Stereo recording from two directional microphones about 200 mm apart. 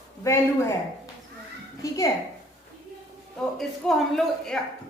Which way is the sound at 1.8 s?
15° left (ahead or behind).